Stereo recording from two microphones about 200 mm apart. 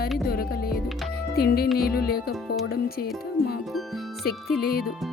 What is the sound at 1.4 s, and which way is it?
Music, 50° left (ahead or behind).